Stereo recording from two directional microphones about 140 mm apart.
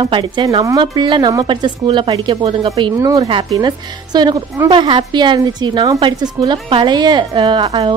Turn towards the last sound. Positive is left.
turn(degrees=-35)  # may be behind; listen again after turning